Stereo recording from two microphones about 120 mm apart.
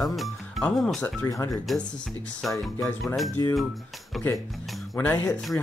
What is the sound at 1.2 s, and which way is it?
Speech, 25° left (ahead or behind).